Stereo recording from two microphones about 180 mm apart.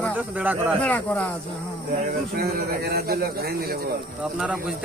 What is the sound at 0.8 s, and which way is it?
Speech, 10° left (ahead or behind).